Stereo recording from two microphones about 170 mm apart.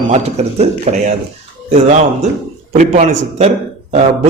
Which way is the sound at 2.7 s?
45° right (ahead or behind).